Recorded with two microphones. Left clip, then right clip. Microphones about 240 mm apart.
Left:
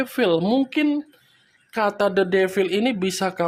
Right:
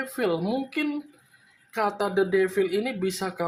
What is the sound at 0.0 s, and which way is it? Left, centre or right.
Speech, left.